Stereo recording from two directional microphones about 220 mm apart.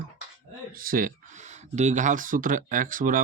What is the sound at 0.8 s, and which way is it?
Speech, 40° right (ahead or behind).